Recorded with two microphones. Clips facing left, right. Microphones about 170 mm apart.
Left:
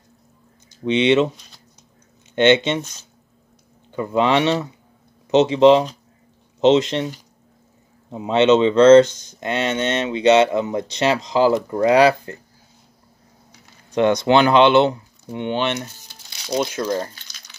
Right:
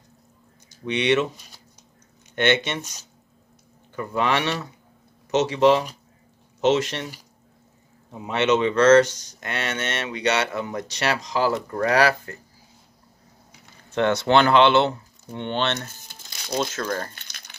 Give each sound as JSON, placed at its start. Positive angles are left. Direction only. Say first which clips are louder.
{"t": 0.8, "sound": "speech", "louder": "left 5 dB", "side_deg": 25}
{"t": 2.3, "sound": "speech", "louder": "left 7 dB", "side_deg": 20}
{"t": 3.9, "sound": "speech", "louder": "left 6 dB", "side_deg": 20}
{"t": 8.1, "sound": "speech", "louder": "left 6 dB", "side_deg": 20}
{"t": 13.8, "sound": "speech", "louder": "left 4 dB", "side_deg": 15}
{"t": 16.0, "sound": "crumpling", "louder": "right 1 dB", "side_deg": -50}
{"t": 16.4, "sound": "speech", "louder": "left 4 dB", "side_deg": 15}
{"t": 17.1, "sound": "a sound", "louder": "even", "side_deg": -55}